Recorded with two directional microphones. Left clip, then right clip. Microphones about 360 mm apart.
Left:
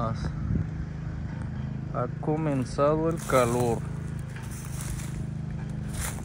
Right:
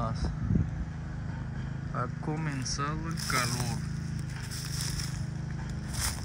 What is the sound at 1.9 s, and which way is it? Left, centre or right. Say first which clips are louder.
Speech: left 6 dB; centre.